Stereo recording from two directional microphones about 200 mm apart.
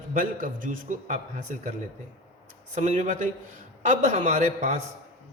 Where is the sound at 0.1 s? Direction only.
45° right (ahead or behind).